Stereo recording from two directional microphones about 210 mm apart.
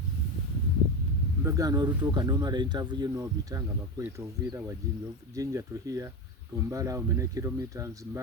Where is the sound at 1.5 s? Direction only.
15° right (ahead or behind).